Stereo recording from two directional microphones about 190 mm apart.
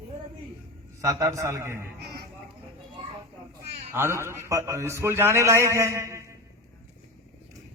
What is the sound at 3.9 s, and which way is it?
A man's voice, 15° right (ahead or behind).